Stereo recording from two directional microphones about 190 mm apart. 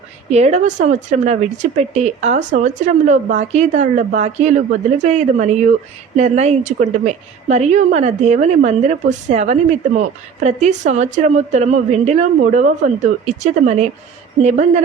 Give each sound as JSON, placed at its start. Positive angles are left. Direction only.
{"t": 0.3, "sound": "speech", "side_deg": -35}